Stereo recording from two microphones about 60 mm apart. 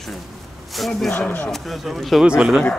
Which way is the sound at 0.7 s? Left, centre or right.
Centre.